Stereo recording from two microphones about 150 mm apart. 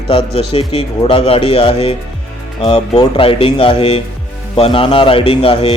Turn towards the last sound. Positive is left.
turn(degrees=40)  # may be behind; listen again after turning